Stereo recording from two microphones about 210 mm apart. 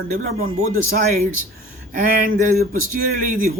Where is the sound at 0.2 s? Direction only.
40° right (ahead or behind).